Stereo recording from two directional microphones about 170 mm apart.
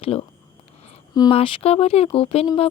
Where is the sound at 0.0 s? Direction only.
35° left (ahead or behind).